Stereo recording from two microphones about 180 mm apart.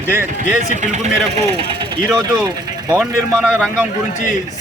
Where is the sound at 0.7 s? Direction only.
40° right (ahead or behind).